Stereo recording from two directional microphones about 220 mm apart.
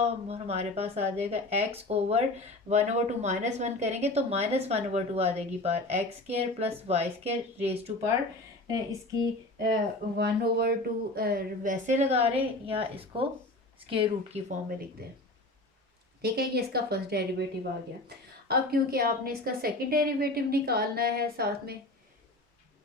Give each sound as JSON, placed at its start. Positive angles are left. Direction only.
{"t": 0.0, "sound": "speech", "side_deg": -30}
{"t": 8.6, "sound": "speech", "side_deg": -15}
{"t": 10.2, "sound": "speech", "side_deg": -45}
{"t": 16.2, "sound": "a woman's voice", "side_deg": -45}
{"t": 18.4, "sound": "a woman's voice", "side_deg": -45}